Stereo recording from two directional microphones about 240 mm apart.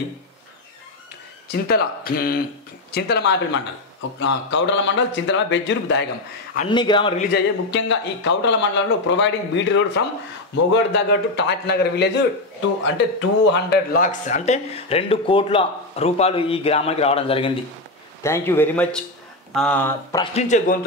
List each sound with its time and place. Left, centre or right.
1.5 s speech: left
6.7 s speech: centre
7.3 s speech: left
18.2 s speech: centre
20.3 s speech: left